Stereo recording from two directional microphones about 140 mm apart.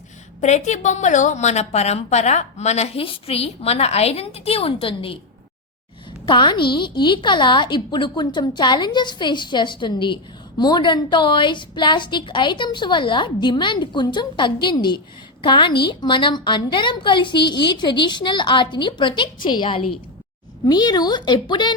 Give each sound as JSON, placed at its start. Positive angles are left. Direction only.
{"t": 0.4, "sound": "a woman's voice", "side_deg": 55}
{"t": 6.2, "sound": "a woman's voice", "side_deg": 35}